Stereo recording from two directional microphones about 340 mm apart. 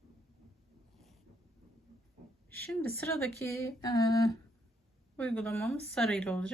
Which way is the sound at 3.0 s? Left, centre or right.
Centre.